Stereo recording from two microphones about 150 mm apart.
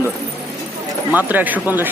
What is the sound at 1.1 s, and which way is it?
Speech, 10° right (ahead or behind).